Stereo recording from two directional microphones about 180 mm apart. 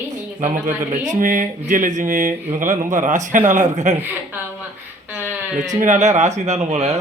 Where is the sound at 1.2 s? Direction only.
45° right (ahead or behind).